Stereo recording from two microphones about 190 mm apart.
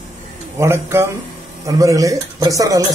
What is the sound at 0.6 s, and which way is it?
Speech, 15° right (ahead or behind).